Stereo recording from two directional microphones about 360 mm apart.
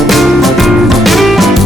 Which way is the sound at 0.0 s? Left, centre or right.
Centre.